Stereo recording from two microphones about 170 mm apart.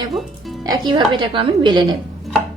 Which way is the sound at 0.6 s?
25° right (ahead or behind).